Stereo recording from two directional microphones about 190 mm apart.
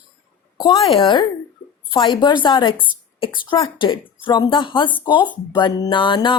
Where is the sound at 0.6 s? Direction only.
25° left (ahead or behind).